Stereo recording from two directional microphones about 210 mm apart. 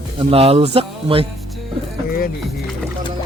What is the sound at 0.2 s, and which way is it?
Speech, 25° right (ahead or behind).